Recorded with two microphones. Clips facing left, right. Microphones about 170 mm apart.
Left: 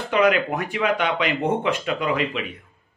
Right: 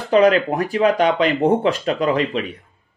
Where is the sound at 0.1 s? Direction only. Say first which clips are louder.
Right 5 dB; 35° right (ahead or behind).